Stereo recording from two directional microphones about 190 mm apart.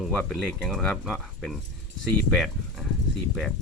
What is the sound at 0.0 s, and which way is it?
Speech, centre (ahead or behind).